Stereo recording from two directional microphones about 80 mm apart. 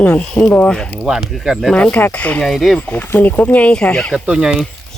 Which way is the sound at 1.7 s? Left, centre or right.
Centre.